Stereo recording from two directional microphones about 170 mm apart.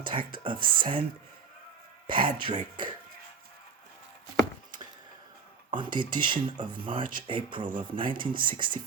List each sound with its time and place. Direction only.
0.1 s speech: 30° right (ahead or behind)
2.0 s speech: 30° right (ahead or behind)
5.7 s speech: 30° right (ahead or behind)